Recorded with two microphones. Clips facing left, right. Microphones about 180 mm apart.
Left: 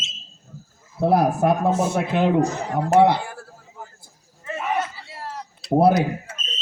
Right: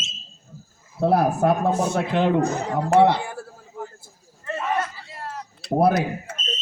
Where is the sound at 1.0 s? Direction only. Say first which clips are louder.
Left 1 dB; 10° left (ahead or behind).